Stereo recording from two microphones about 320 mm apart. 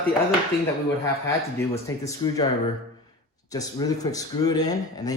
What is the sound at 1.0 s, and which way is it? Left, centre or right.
Speech, centre.